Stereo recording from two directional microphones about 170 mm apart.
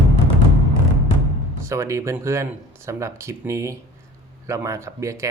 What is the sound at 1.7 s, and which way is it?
Speech, 15° right (ahead or behind).